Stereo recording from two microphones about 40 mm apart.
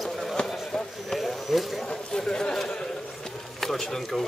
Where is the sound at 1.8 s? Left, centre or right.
Centre.